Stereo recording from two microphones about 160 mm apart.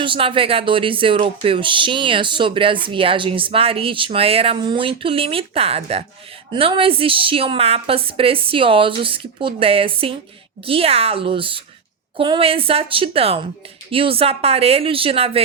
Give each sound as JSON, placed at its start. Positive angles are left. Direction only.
{"t": 0.0, "sound": "a woman's voice", "side_deg": -35}